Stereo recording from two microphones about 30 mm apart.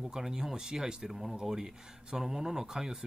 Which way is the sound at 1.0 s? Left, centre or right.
Centre.